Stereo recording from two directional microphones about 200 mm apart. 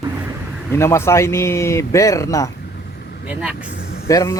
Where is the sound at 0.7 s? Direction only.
15° left (ahead or behind).